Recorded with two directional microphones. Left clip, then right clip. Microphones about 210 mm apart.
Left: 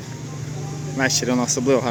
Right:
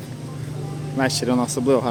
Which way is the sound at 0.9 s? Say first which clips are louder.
Left 1 dB; 10° right (ahead or behind).